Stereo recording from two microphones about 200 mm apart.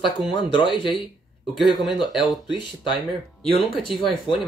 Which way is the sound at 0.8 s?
25° left (ahead or behind).